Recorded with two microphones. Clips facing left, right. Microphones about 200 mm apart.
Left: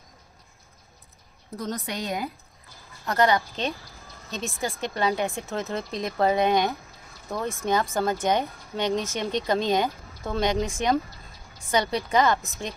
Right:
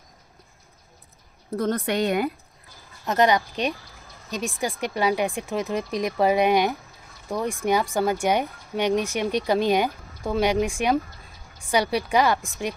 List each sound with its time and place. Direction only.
1.5 s a woman's voice: 60° right (ahead or behind)
3.1 s speech: 20° right (ahead or behind)